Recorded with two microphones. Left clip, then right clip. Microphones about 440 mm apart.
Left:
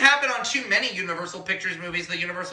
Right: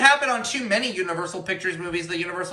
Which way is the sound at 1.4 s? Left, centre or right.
Centre.